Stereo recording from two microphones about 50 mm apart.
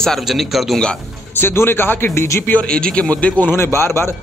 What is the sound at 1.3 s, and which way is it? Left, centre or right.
Speech, left.